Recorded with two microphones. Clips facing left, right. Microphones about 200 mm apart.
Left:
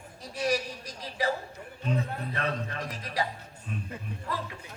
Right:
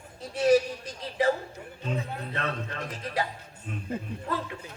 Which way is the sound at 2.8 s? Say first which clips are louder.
Right 2 dB; 25° right (ahead or behind).